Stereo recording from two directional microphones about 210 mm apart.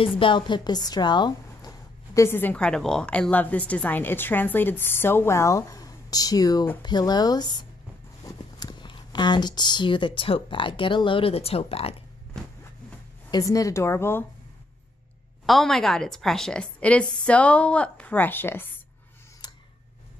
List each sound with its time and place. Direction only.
0.0 s speech: 25° left (ahead or behind)
13.3 s speech: 15° left (ahead or behind)
15.4 s a woman's voice: centre (ahead or behind)